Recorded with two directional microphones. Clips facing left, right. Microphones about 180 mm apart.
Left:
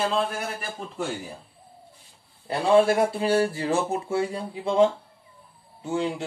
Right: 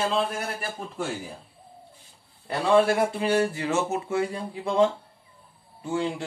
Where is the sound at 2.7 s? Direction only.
10° left (ahead or behind).